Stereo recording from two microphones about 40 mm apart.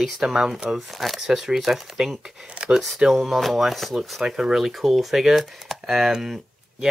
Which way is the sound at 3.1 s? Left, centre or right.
Centre.